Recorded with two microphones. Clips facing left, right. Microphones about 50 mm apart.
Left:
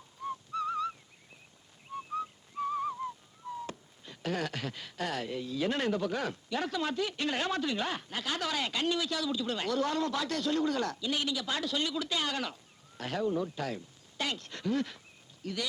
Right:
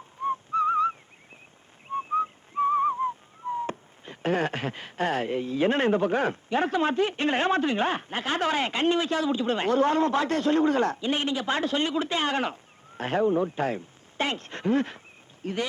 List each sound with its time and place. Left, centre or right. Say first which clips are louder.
0.2 s whistling: right 10 dB; right
13.0 s speech: right 8 dB; right